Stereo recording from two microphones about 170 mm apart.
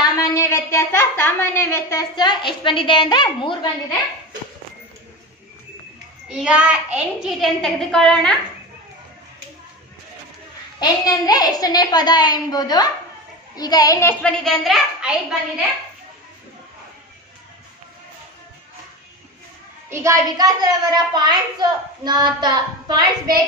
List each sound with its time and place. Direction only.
0.1 s a woman's voice: 20° left (ahead or behind)
6.2 s a woman's voice: 5° right (ahead or behind)
10.8 s a child's voice: 20° left (ahead or behind)
14.2 s a woman's voice: centre (ahead or behind)
19.9 s a child's voice: 15° right (ahead or behind)